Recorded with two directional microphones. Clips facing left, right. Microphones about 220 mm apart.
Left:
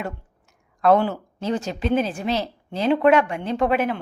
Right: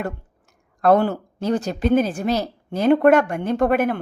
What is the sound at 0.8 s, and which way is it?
A woman's voice, 45° right (ahead or behind).